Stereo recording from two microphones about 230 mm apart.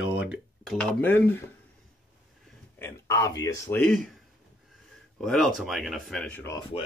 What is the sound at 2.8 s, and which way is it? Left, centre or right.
Speech, centre.